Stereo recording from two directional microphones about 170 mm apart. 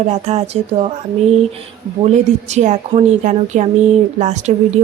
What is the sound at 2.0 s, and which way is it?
Speech, 40° right (ahead or behind).